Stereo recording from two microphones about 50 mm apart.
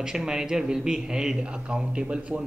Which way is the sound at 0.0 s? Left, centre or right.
Centre.